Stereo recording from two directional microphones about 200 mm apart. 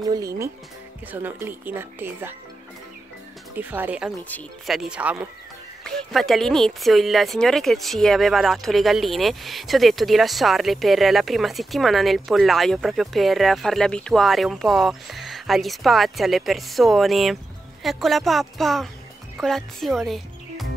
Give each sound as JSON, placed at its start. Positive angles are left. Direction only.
{"t": 0.1, "sound": "speech", "side_deg": -15}
{"t": 3.5, "sound": "speech", "side_deg": -10}
{"t": 4.2, "sound": "speech", "side_deg": 5}